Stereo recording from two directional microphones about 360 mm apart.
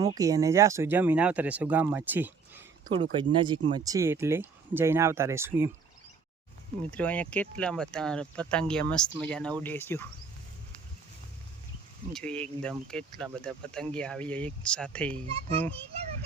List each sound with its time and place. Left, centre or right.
0.0 s speech: centre
6.9 s speech: centre
12.1 s speech: centre
15.3 s speech: centre